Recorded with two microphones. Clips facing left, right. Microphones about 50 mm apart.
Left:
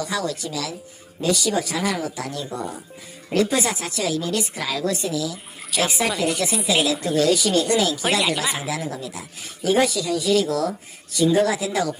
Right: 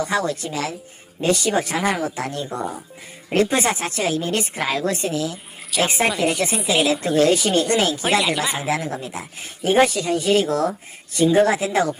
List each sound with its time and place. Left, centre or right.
0.0 s speech: right
8.2 s speech: centre
8.6 s speech: right